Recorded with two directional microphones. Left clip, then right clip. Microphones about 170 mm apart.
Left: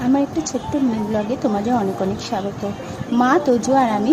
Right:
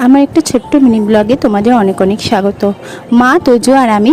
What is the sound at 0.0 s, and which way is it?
Speech, 65° right (ahead or behind).